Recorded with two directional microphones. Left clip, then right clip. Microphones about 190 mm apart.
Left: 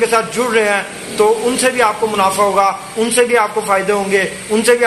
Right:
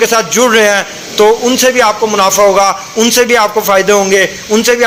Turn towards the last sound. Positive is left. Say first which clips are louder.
# right 3 dB
turn(degrees=-30)  # may be behind; listen again after turning